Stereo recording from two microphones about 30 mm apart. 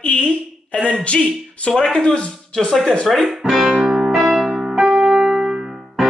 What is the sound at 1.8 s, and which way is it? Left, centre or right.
Speech, left.